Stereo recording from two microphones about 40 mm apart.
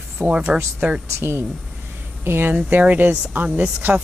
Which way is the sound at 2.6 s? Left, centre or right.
Right.